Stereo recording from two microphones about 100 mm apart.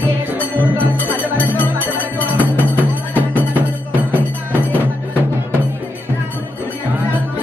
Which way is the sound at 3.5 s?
15° right (ahead or behind).